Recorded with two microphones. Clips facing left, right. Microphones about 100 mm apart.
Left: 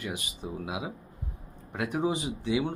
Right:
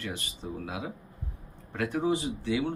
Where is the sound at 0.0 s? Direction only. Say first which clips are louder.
Left 1 dB; 15° left (ahead or behind).